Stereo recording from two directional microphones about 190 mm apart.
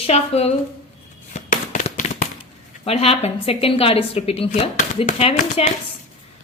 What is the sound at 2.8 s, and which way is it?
Speech, 30° left (ahead or behind).